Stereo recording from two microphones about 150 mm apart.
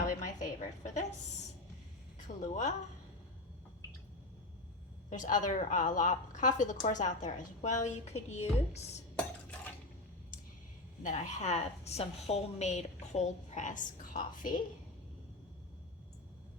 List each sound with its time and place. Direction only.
0.0 s a sound: 60° left (ahead or behind)
2.1 s a woman's voice: 55° left (ahead or behind)
5.0 s a woman's voice: 55° left (ahead or behind)
9.1 s stir: 10° left (ahead or behind)
11.0 s a woman's voice: 50° left (ahead or behind)